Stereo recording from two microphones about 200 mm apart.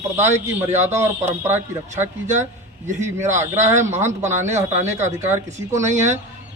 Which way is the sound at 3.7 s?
10° right (ahead or behind).